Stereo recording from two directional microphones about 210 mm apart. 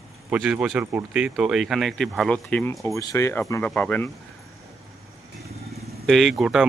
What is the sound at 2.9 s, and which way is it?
Speech, 15° left (ahead or behind).